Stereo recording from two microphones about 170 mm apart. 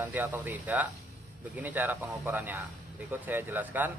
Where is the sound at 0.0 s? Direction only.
10° right (ahead or behind).